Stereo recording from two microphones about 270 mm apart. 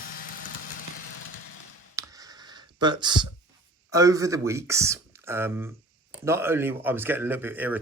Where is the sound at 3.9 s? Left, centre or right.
Centre.